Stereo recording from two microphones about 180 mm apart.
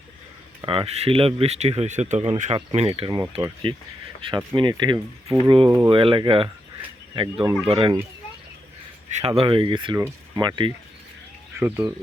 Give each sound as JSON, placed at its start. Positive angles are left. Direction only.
{"t": 0.6, "sound": "speech", "side_deg": -30}
{"t": 9.1, "sound": "speech", "side_deg": -35}
{"t": 11.5, "sound": "speech", "side_deg": -10}